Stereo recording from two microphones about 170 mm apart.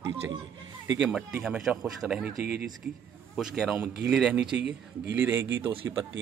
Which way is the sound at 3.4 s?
Centre (ahead or behind).